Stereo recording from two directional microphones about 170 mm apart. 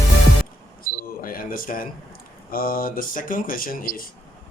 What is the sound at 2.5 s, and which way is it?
Speech, 60° left (ahead or behind).